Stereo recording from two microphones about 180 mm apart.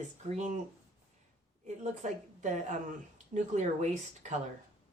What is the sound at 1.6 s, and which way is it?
A woman's voice, 40° right (ahead or behind).